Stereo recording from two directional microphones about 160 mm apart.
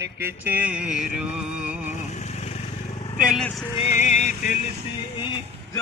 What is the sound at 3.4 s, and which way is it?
Vehicle, 10° left (ahead or behind).